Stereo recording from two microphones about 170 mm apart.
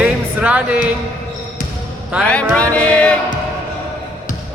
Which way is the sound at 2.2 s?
5° left (ahead or behind).